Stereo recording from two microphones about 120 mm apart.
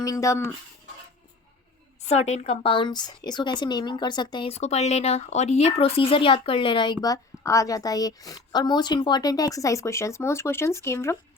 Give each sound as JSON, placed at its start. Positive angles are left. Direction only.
{"t": 0.0, "sound": "speech", "side_deg": 25}
{"t": 2.0, "sound": "speech", "side_deg": 70}
{"t": 4.4, "sound": "speech", "side_deg": 65}
{"t": 5.6, "sound": "speech", "side_deg": 55}